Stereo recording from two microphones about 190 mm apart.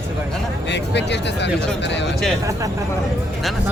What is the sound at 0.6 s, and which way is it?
Speech, 65° left (ahead or behind).